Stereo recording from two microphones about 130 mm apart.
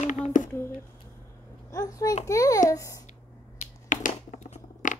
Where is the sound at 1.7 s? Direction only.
25° left (ahead or behind).